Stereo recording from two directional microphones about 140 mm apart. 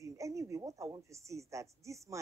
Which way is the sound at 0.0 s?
20° right (ahead or behind).